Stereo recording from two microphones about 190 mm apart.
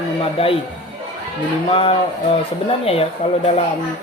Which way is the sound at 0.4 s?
30° left (ahead or behind).